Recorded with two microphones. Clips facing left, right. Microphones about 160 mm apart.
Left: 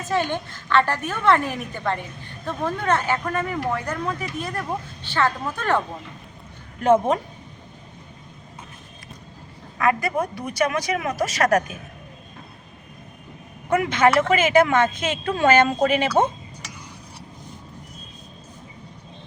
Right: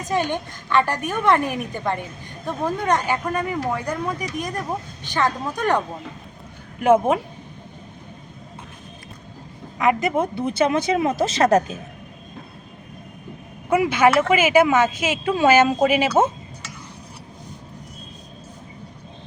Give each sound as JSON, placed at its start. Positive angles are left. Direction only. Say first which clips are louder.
{"t": 0.0, "sound": "speech", "louder": "right 1 dB", "side_deg": -15}
{"t": 9.7, "sound": "speech", "louder": "right 2 dB", "side_deg": -20}
{"t": 13.7, "sound": "speech", "louder": "right 2 dB", "side_deg": -5}